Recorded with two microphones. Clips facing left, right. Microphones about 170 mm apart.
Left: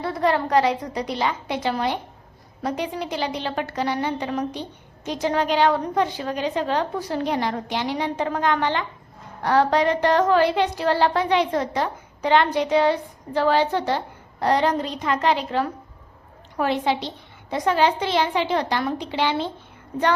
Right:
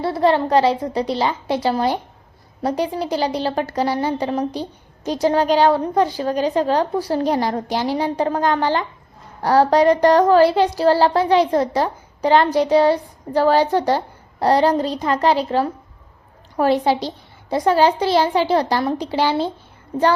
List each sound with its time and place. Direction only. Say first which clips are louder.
0.0 s speech: right 5 dB; 30° right (ahead or behind)